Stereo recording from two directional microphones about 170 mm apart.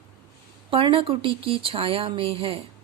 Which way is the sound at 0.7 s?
30° right (ahead or behind).